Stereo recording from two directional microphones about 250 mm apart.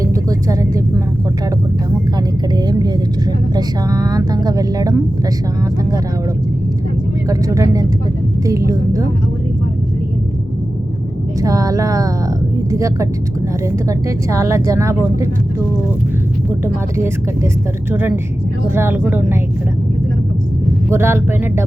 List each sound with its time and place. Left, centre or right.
0.0 s a sound: centre
2.1 s vehicle: centre
7.3 s speech: centre
11.3 s speech: centre
18.7 s speech: centre
20.9 s speech: centre